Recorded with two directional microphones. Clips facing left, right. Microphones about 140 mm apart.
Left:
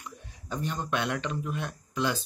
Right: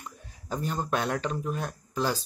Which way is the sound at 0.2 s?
40° right (ahead or behind).